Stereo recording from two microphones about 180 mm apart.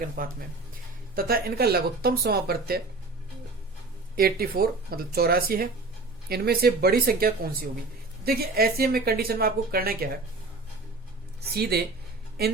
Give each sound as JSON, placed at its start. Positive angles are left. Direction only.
{"t": 0.2, "sound": "speech", "side_deg": -50}
{"t": 4.1, "sound": "speech", "side_deg": -60}
{"t": 11.5, "sound": "speech", "side_deg": -60}